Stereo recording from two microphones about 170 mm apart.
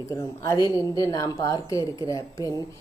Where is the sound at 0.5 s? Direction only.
20° right (ahead or behind).